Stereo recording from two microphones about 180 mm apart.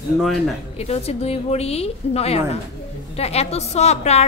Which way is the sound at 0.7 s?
35° left (ahead or behind).